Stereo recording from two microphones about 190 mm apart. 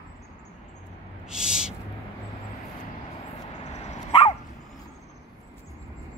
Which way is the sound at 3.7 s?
35° left (ahead or behind).